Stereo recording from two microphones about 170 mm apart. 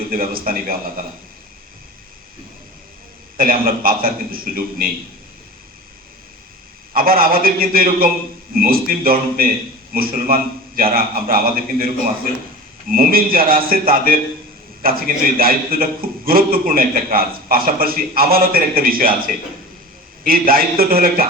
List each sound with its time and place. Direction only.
0.1 s a man's voice: 60° right (ahead or behind)
3.3 s a man's voice: 55° right (ahead or behind)
6.9 s a man's voice: 60° right (ahead or behind)
20.5 s a man's voice: 60° right (ahead or behind)